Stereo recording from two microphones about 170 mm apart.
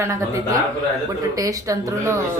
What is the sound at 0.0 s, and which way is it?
A woman's voice, 20° right (ahead or behind).